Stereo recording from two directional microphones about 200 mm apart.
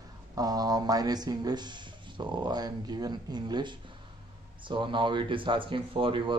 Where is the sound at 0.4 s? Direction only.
20° right (ahead or behind).